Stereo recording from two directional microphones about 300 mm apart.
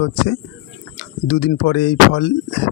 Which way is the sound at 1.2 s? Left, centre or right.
Left.